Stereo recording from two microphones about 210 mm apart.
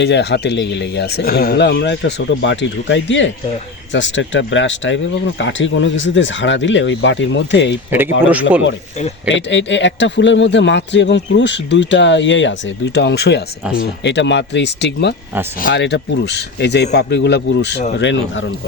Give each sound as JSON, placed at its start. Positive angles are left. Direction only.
{"t": 0.0, "sound": "a man's voice", "side_deg": 55}
{"t": 7.9, "sound": "speech", "side_deg": -10}
{"t": 9.3, "sound": "a man's voice", "side_deg": 60}